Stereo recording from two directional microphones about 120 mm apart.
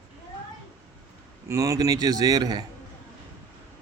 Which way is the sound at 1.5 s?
25° right (ahead or behind).